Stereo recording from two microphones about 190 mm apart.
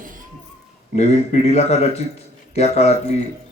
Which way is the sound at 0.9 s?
35° left (ahead or behind).